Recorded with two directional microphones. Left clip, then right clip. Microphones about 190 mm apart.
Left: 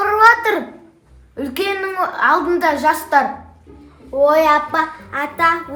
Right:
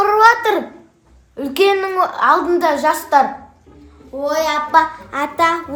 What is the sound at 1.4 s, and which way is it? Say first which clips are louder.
A woman's voice: right 6 dB; 25° right (ahead or behind).